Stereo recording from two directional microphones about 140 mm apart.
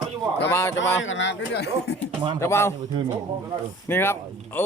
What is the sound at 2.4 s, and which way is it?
Speech, 20° left (ahead or behind).